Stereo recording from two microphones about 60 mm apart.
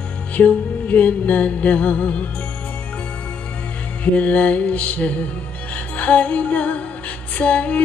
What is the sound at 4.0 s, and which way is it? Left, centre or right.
Music, left.